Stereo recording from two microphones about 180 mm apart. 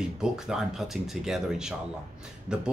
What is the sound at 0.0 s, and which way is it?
Speech, 5° right (ahead or behind).